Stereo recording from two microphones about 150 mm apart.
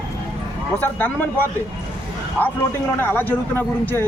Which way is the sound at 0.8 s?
10° left (ahead or behind).